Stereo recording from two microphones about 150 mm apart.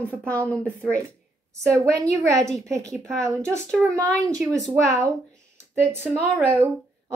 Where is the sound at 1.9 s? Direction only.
20° right (ahead or behind).